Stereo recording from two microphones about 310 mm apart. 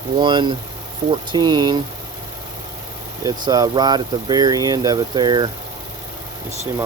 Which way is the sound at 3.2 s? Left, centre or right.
Centre.